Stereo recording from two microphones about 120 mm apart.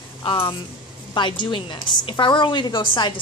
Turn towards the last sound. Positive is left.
turn(degrees=40)  # may be behind; listen again after turning